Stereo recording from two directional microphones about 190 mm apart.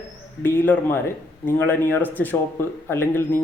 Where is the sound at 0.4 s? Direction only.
10° left (ahead or behind).